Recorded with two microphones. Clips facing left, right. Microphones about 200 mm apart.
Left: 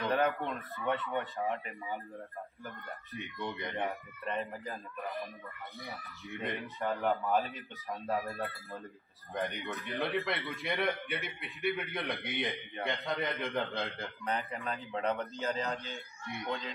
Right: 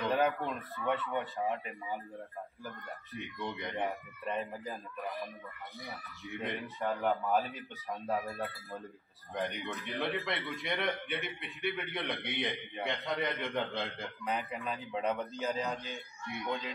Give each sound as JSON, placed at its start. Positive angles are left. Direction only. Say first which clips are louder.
{"t": 0.0, "sound": "a man's voice", "louder": "even", "side_deg": 0}
{"t": 5.8, "sound": "a man's voice", "louder": "even", "side_deg": 0}
{"t": 15.7, "sound": "speech", "louder": "even", "side_deg": -15}
{"t": 16.3, "sound": "a man's voice", "louder": "right 1 dB", "side_deg": 0}